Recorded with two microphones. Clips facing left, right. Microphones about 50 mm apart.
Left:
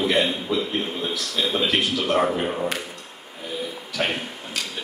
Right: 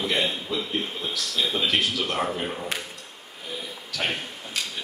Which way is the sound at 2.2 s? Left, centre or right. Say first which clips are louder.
Left 5 dB; left.